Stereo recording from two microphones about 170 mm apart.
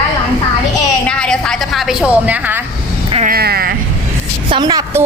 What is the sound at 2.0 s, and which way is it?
Speech, 10° right (ahead or behind).